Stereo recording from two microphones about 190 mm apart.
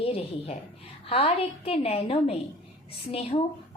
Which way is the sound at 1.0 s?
30° left (ahead or behind).